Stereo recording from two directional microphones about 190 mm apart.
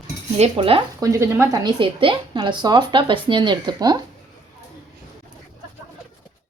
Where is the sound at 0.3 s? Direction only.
30° right (ahead or behind).